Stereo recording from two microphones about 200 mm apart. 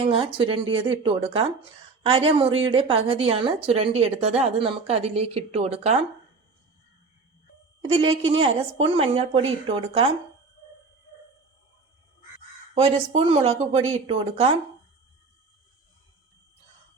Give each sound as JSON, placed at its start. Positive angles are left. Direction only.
{"t": 0.0, "sound": "a woman's voice", "side_deg": -25}
{"t": 7.8, "sound": "a woman's voice", "side_deg": -30}
{"t": 12.7, "sound": "speech", "side_deg": -30}